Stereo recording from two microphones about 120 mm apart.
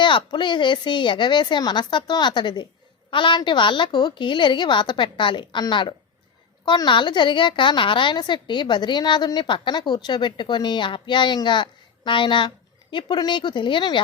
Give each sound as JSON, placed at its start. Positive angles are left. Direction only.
{"t": 0.0, "sound": "a woman's voice", "side_deg": 40}